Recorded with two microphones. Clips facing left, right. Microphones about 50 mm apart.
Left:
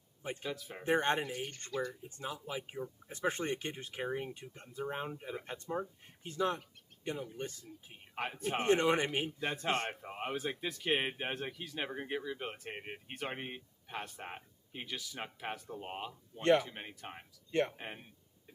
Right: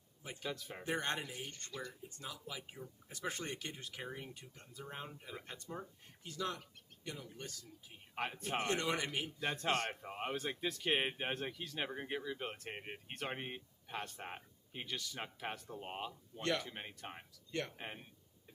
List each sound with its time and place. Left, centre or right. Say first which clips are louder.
0.2 s speech: left 8 dB; left
0.4 s speech: left 2 dB; centre
0.9 s speech: left 8 dB; left
1.2 s speech: left 7 dB; left
2.0 s speech: left 6 dB; left
8.1 s a man's voice: left 3 dB; centre
8.5 s speech: left 7 dB; left
9.9 s speech: left 2 dB; centre
16.4 s speech: left 9 dB; left
16.6 s speech: left 1 dB; centre
17.5 s speech: left 9 dB; left
17.7 s a sound: left 2 dB; centre